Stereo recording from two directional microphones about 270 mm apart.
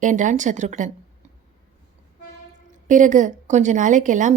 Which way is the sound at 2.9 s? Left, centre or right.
Right.